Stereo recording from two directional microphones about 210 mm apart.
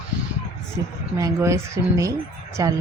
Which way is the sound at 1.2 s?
15° right (ahead or behind).